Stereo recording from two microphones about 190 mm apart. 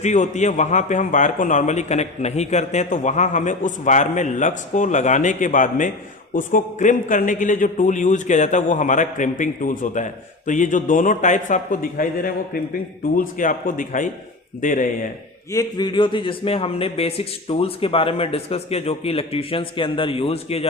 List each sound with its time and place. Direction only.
0.0 s a man's voice: 40° left (ahead or behind)
15.5 s speech: 20° left (ahead or behind)